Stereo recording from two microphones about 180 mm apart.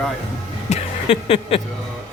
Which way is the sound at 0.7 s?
35° left (ahead or behind).